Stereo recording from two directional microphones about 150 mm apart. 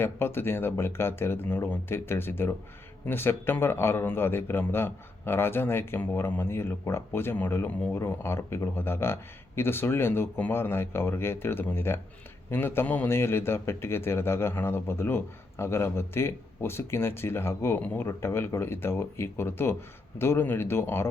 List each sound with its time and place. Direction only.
0.0 s a man's voice: 15° left (ahead or behind)